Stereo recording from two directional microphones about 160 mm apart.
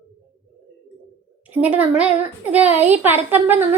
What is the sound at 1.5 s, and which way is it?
A woman's voice, 10° right (ahead or behind).